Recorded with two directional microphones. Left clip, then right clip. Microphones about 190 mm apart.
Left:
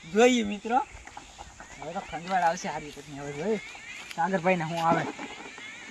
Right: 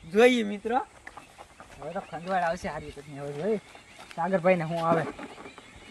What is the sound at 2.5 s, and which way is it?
Speech, 40° right (ahead or behind).